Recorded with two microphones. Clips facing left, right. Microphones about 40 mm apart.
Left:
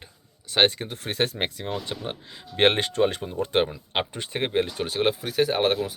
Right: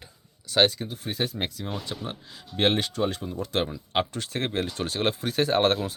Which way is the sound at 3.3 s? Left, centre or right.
Left.